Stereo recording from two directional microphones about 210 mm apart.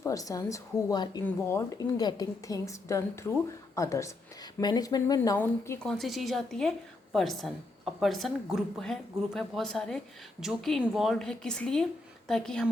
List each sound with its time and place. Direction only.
0.0 s a woman's voice: 15° left (ahead or behind)